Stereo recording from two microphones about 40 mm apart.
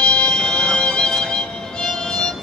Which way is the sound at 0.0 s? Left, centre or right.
Left.